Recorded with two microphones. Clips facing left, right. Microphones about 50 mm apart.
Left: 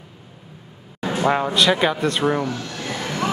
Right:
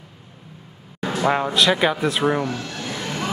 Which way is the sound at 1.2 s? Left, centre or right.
Centre.